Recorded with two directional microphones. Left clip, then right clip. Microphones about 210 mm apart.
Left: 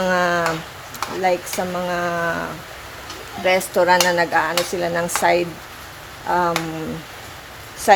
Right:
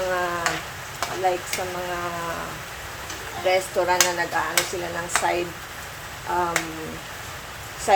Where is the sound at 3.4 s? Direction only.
55° left (ahead or behind).